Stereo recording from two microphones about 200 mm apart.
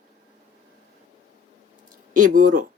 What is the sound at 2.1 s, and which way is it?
Speech, 40° right (ahead or behind).